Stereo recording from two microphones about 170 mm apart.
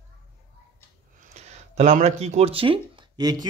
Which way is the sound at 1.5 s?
40° right (ahead or behind).